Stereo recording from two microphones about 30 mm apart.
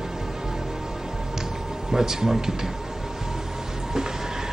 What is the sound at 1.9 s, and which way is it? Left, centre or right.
Speech, centre.